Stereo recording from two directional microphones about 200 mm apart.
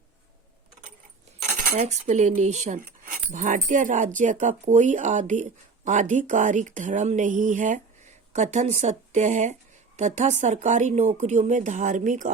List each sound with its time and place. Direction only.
1.5 s speech: 40° right (ahead or behind)